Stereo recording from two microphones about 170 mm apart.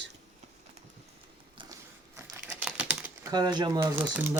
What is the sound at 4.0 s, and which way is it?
Speech, 10° right (ahead or behind).